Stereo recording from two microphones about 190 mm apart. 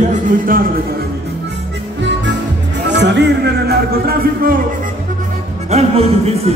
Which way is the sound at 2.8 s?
65° right (ahead or behind).